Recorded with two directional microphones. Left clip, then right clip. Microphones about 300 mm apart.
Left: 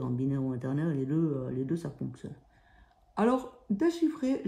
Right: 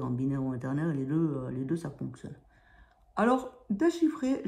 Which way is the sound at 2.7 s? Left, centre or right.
Left.